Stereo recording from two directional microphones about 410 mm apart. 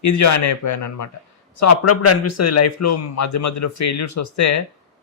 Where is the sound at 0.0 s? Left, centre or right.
Left.